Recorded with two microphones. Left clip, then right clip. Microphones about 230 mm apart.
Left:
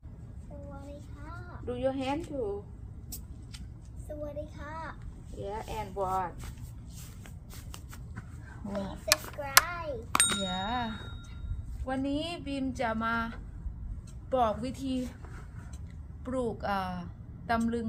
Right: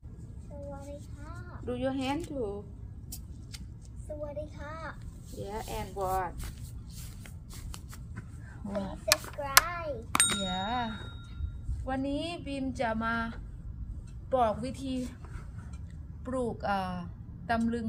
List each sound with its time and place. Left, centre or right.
1.6 s speech: right
4.4 s a child's voice: centre
5.4 s speech: right
8.6 s a child's voice: centre
16.2 s a woman's voice: centre